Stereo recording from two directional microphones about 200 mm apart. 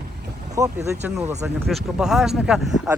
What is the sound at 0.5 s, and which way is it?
Speech, 15° right (ahead or behind).